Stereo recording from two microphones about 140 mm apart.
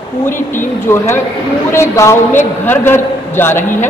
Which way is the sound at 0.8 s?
20° left (ahead or behind).